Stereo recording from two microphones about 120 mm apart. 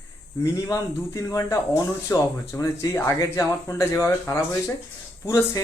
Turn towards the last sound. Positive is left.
turn(degrees=25)  # may be behind; listen again after turning